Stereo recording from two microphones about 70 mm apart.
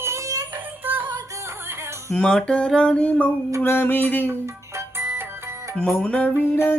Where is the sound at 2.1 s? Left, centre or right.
Centre.